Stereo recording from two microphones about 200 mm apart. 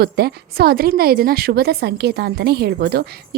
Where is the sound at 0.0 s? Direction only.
50° right (ahead or behind).